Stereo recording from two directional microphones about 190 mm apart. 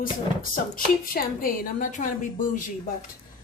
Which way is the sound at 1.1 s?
50° left (ahead or behind).